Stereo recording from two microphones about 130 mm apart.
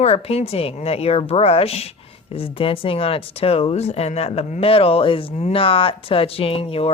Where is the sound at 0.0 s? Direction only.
50° left (ahead or behind).